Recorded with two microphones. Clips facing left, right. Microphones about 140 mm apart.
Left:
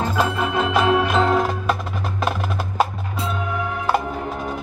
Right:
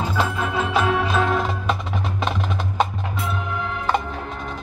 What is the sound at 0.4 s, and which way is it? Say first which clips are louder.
Music: left 2 dB; 15° left (ahead or behind).